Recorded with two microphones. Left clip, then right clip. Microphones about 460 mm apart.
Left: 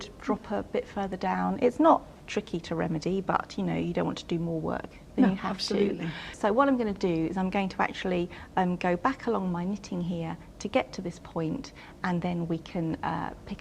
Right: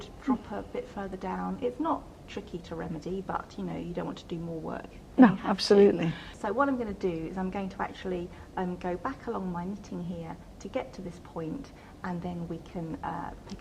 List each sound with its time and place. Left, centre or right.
0.0 s a woman's voice: left
5.5 s speech: centre
6.1 s a woman's voice: left